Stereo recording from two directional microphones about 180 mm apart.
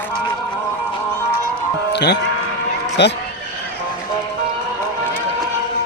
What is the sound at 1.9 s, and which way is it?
Music, 65° left (ahead or behind).